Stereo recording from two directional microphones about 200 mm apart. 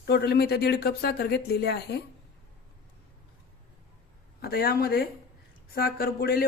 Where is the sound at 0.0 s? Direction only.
55° left (ahead or behind).